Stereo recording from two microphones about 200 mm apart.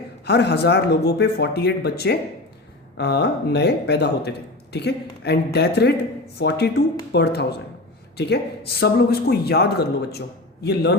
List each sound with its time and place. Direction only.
0.3 s speech: 55° left (ahead or behind)
8.8 s speech: 50° left (ahead or behind)